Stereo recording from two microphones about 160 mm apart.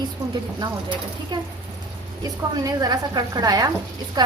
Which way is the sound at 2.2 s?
25° right (ahead or behind).